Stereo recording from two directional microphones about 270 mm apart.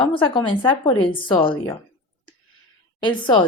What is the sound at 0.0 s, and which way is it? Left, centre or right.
A woman's voice, centre.